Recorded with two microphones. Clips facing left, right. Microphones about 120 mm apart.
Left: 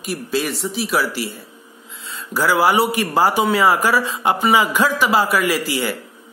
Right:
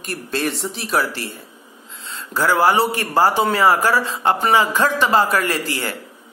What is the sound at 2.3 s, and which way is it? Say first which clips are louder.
Speech: even; 10° left (ahead or behind).